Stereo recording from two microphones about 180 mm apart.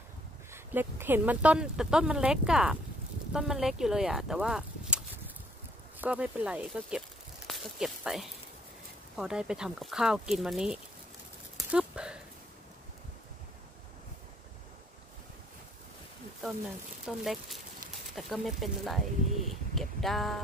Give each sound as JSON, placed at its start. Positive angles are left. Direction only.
{"t": 0.5, "sound": "speech", "side_deg": -10}
{"t": 11.5, "sound": "a sound", "side_deg": -5}
{"t": 17.0, "sound": "speech", "side_deg": 0}